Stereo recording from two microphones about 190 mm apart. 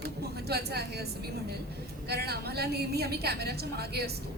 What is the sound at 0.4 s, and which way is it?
Speech, 60° right (ahead or behind).